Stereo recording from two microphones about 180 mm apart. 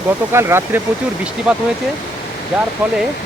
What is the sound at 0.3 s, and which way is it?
Speech, 15° right (ahead or behind).